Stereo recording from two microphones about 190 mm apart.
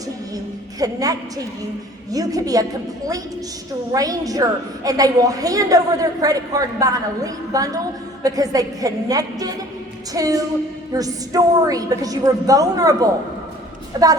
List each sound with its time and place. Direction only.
0.8 s a woman's voice: 20° right (ahead or behind)
3.9 s a woman's voice: 20° right (ahead or behind)